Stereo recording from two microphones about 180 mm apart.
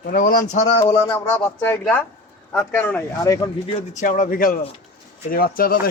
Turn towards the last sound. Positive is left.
turn(degrees=55)  # may be behind; listen again after turning